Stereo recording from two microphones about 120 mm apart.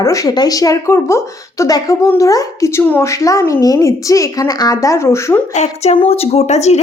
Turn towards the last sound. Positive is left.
turn(degrees=65)  # may be behind; listen again after turning